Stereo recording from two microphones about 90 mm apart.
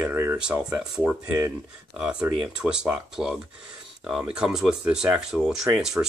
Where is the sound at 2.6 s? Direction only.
10° right (ahead or behind).